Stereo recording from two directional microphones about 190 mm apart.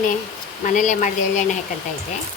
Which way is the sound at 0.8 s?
40° left (ahead or behind).